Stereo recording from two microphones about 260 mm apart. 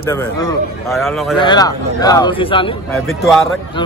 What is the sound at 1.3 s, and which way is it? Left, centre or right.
A man's voice, centre.